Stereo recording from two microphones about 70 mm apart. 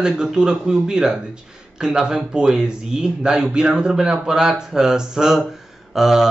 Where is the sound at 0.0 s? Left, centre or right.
Centre.